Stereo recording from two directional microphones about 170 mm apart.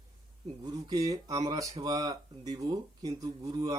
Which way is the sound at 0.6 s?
20° right (ahead or behind).